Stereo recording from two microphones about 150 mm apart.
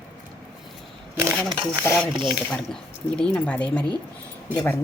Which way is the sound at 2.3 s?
5° left (ahead or behind).